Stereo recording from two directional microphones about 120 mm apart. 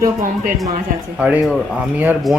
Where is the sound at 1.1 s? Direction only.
10° right (ahead or behind).